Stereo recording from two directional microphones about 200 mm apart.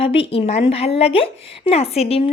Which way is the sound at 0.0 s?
30° left (ahead or behind).